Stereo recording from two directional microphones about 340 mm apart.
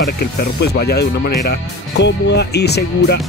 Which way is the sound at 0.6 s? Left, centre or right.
Left.